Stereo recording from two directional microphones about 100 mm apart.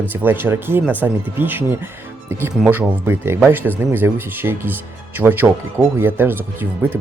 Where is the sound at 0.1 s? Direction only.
20° right (ahead or behind).